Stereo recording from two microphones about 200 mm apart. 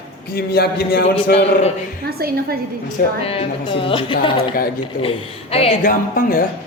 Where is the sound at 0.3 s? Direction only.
55° left (ahead or behind).